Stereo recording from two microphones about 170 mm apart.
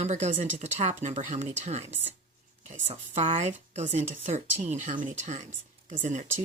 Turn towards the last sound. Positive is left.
turn(degrees=-45)  # may be behind; listen again after turning